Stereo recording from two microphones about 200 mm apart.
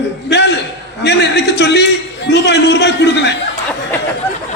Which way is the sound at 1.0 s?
60° left (ahead or behind).